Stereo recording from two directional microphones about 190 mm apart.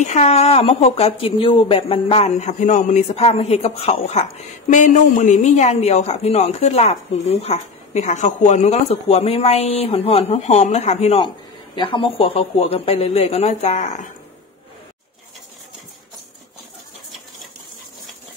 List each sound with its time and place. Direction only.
0.0 s speech: 35° left (ahead or behind)